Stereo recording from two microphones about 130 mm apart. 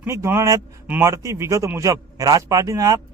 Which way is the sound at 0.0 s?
20° right (ahead or behind).